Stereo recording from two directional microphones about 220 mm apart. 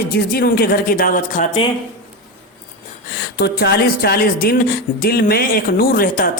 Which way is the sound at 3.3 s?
50° left (ahead or behind).